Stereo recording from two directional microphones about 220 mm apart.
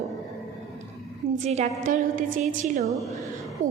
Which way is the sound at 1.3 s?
30° right (ahead or behind).